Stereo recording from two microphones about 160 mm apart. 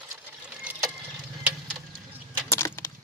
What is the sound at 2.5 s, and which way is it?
Keys jangling, 15° left (ahead or behind).